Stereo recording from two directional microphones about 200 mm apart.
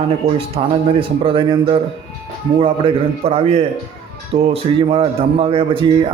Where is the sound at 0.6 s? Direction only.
30° right (ahead or behind).